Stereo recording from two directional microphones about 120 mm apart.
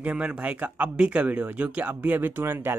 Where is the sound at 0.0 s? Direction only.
10° right (ahead or behind).